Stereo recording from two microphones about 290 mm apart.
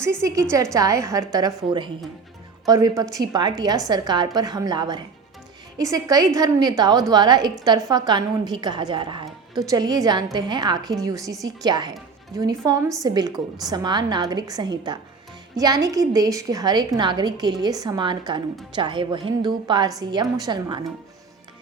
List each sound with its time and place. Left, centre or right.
0.0 s a woman's voice: centre